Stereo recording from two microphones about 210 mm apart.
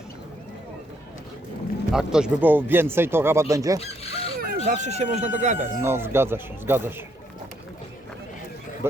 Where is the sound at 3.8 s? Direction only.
30° left (ahead or behind).